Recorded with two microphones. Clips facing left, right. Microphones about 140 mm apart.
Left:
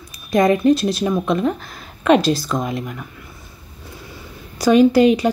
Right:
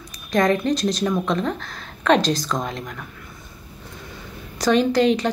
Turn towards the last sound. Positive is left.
turn(degrees=10)  # may be behind; listen again after turning